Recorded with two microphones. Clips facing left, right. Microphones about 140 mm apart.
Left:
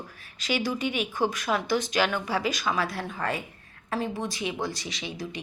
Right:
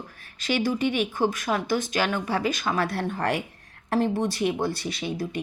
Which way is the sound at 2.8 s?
60° right (ahead or behind).